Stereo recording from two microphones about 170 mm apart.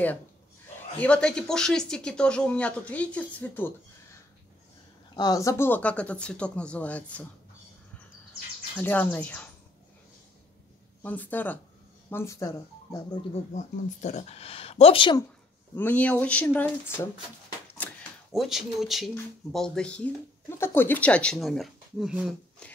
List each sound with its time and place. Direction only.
0.9 s speech: 5° left (ahead or behind)
5.1 s speech: 20° left (ahead or behind)
8.7 s speech: 10° left (ahead or behind)
11.0 s speech: 10° left (ahead or behind)
13.3 s speech: 45° left (ahead or behind)
15.7 s speech: 10° left (ahead or behind)
18.3 s speech: centre (ahead or behind)